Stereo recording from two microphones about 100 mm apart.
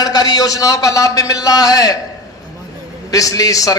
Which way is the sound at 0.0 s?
40° left (ahead or behind).